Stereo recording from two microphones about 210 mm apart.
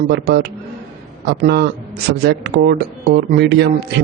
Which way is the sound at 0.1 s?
50° right (ahead or behind).